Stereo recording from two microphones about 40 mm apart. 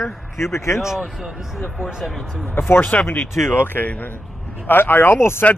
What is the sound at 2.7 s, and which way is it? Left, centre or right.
Speech, left.